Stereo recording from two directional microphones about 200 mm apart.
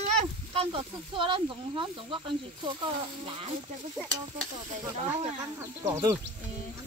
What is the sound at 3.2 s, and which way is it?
Music, 25° right (ahead or behind).